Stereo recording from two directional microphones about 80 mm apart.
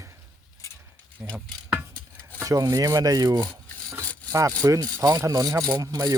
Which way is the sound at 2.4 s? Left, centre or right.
Right.